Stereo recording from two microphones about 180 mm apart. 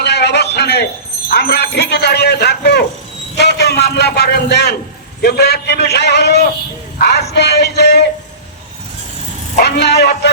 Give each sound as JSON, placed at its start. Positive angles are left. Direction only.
{"t": 0.0, "sound": "a sound", "side_deg": 65}
{"t": 1.3, "sound": "speech", "side_deg": 60}
{"t": 9.6, "sound": "speech", "side_deg": 65}